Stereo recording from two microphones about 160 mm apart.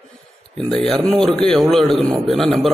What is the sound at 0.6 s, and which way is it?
Speech, 5° left (ahead or behind).